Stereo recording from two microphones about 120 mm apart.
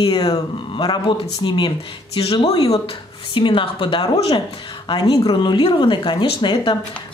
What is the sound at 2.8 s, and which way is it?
A woman's voice, 45° left (ahead or behind).